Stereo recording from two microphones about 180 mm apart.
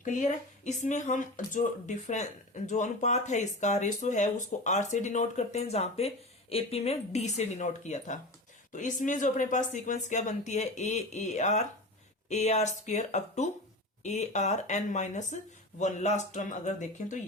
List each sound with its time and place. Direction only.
0.0 s speech: 45° left (ahead or behind)